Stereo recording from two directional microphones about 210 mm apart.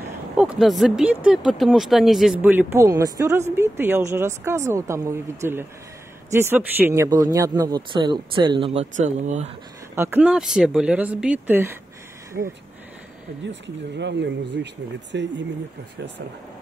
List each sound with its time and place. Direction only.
0.4 s a man's voice: 5° right (ahead or behind); by 9.5 s 35° right (ahead or behind)
9.9 s speech: 10° right (ahead or behind)
12.4 s speech: 55° right (ahead or behind)
13.9 s speech: 55° right (ahead or behind)